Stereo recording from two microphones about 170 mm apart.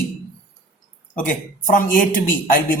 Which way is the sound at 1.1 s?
50° left (ahead or behind).